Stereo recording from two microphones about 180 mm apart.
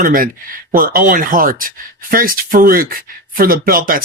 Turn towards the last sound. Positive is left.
turn(degrees=-50)  # may be behind; listen again after turning